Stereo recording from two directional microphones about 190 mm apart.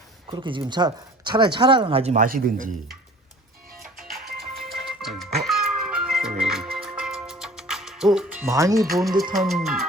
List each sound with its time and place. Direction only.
0.3 s speech: 25° right (ahead or behind); by 2.6 s 50° right (ahead or behind)
3.9 s music: centre (ahead or behind)
8.9 s speech: centre (ahead or behind)